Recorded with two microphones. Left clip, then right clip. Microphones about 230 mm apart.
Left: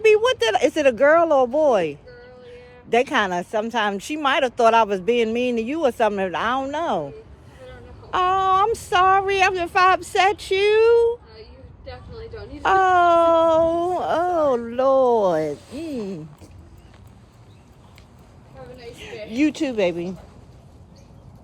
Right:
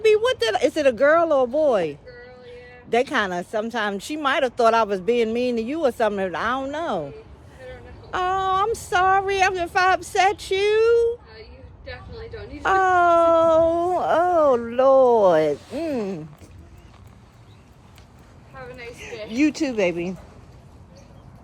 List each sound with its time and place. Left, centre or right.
0.0 s speech: centre
8.1 s speech: centre
12.6 s a sound: centre
19.4 s speech: centre
19.6 s speech: centre